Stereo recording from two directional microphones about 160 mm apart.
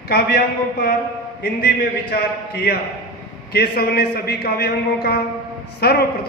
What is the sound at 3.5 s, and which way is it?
A man's voice, 80° left.